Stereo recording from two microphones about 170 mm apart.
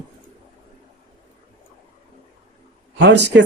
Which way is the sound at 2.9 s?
90° right.